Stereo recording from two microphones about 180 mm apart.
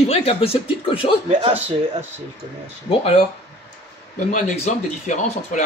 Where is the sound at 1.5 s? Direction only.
10° right (ahead or behind).